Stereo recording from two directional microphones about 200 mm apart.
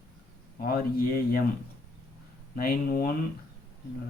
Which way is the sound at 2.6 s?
45° left (ahead or behind).